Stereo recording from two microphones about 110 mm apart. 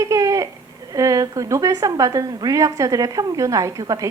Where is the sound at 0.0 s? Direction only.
30° right (ahead or behind).